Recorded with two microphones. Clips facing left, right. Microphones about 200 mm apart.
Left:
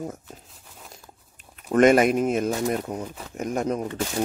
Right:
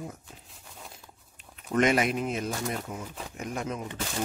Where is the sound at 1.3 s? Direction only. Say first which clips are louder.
Left 6 dB; 50° left (ahead or behind).